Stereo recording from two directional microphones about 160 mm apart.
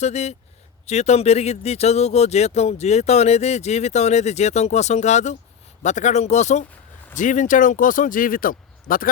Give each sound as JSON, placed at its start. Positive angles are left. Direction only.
{"t": 0.0, "sound": "speech", "side_deg": 45}